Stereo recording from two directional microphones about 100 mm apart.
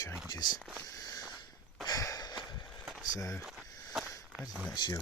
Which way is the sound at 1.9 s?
35° left (ahead or behind).